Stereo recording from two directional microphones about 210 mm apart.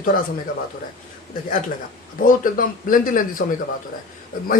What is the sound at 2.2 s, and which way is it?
Speech, 40° left (ahead or behind).